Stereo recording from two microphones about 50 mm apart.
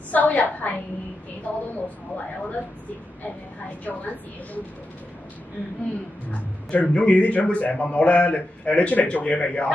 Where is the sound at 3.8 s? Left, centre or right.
Left.